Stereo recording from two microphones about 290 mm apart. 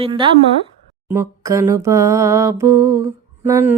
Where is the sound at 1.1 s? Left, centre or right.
Centre.